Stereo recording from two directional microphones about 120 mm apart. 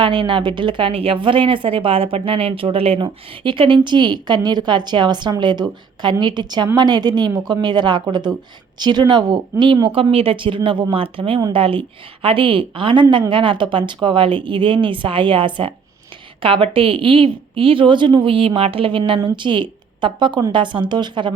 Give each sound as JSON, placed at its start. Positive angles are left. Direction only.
{"t": 0.0, "sound": "a woman's voice", "side_deg": -40}
{"t": 9.9, "sound": "a woman's voice", "side_deg": -50}